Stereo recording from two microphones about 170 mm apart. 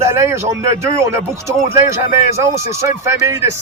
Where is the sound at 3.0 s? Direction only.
15° right (ahead or behind).